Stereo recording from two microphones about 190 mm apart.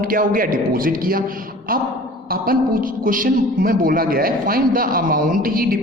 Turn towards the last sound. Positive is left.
turn(degrees=-50)  # may be behind; listen again after turning